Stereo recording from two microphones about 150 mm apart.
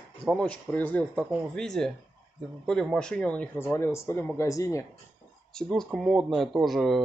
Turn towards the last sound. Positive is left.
turn(degrees=0)  # may be behind; listen again after turning